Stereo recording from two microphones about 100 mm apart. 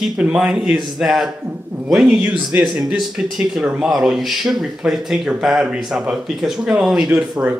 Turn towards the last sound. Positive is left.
turn(degrees=-5)  # may be behind; listen again after turning